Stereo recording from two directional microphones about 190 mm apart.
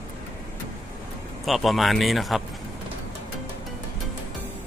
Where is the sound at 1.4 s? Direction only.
Centre (ahead or behind).